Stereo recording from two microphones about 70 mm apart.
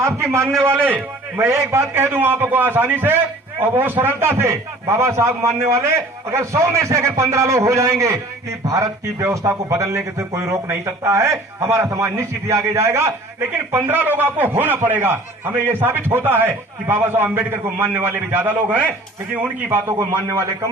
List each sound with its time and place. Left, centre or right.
0.0 s speech: right
0.8 s a man's voice: right
8.6 s a man's voice: right
19.9 s a man's voice: right